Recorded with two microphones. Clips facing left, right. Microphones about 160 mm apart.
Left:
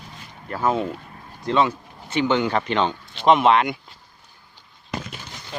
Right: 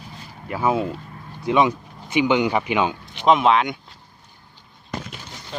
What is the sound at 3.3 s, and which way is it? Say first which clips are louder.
Speech: even; centre (ahead or behind).